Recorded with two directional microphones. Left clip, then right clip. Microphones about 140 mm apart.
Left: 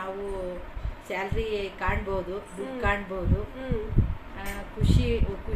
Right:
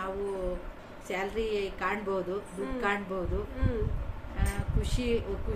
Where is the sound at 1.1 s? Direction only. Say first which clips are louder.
Left 2 dB; 20° right (ahead or behind).